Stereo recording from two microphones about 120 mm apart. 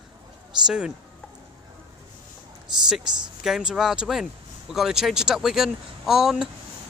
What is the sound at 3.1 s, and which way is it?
Speech, 5° right (ahead or behind).